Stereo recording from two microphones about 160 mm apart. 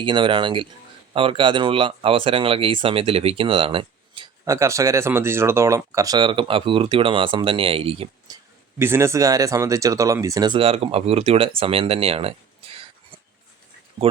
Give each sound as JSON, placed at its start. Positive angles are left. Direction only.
{"t": 0.0, "sound": "speech", "side_deg": -30}
{"t": 4.4, "sound": "speech", "side_deg": -20}
{"t": 8.8, "sound": "speech", "side_deg": -15}
{"t": 14.0, "sound": "speech", "side_deg": -30}